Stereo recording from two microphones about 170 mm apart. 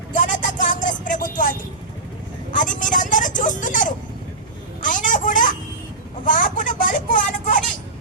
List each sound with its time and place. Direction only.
0.1 s vehicle: 50° left (ahead or behind)
4.8 s a sound: 50° left (ahead or behind)
6.2 s vehicle: 50° left (ahead or behind)